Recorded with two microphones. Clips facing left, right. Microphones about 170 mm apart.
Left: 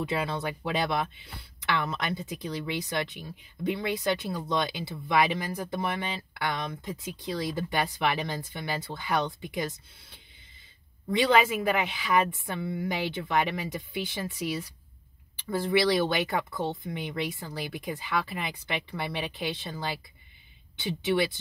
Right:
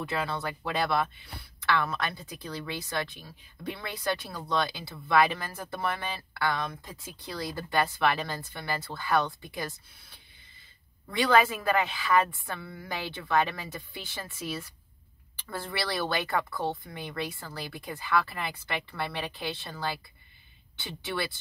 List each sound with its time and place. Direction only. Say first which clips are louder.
0.0 s speech: left 2 dB; 20° left (ahead or behind)